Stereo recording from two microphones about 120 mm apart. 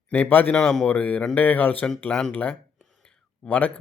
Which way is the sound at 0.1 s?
15° left (ahead or behind).